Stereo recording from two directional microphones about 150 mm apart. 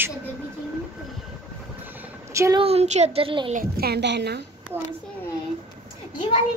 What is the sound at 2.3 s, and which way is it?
Speech, 20° right (ahead or behind).